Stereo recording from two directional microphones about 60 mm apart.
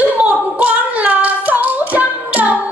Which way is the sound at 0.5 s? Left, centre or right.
Right.